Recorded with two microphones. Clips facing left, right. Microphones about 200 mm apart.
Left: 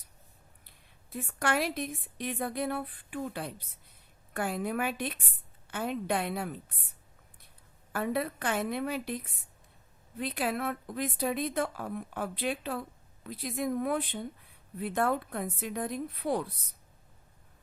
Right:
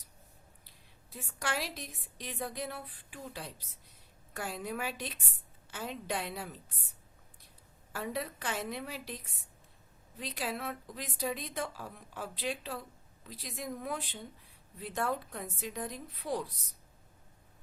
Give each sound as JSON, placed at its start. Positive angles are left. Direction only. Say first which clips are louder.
{"t": 1.1, "sound": "a woman's voice", "louder": "left 7 dB", "side_deg": 55}
{"t": 7.9, "sound": "a woman's voice", "louder": "left 6 dB", "side_deg": 55}